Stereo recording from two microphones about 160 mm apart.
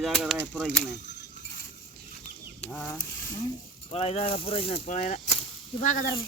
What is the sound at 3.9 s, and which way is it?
Speech, 40° left (ahead or behind).